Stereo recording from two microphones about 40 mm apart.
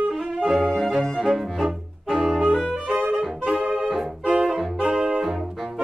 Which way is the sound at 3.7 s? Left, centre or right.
Centre.